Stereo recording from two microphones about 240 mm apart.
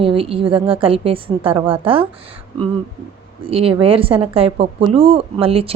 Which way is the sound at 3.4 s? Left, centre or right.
Right.